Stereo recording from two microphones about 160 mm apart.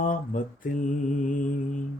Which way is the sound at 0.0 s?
55° left (ahead or behind).